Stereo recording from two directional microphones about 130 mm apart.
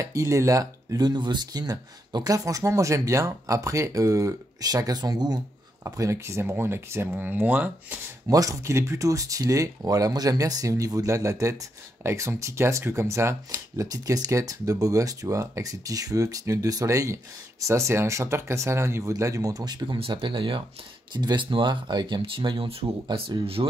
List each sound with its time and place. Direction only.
0.0 s speech: 25° right (ahead or behind)
8.3 s speech: 25° right (ahead or behind); by 23.7 s 45° right (ahead or behind)